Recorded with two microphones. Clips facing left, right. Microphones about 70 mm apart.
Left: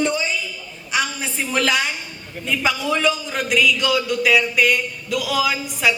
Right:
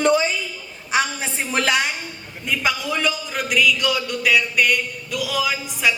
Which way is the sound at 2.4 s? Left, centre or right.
Centre.